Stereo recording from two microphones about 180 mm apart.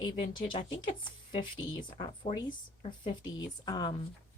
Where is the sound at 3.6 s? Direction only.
25° left (ahead or behind).